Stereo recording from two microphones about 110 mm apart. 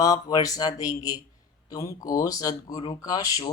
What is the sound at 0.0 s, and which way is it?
Speech, 35° left (ahead or behind).